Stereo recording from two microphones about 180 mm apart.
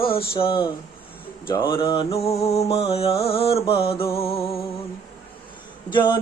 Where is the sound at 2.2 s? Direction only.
35° left (ahead or behind).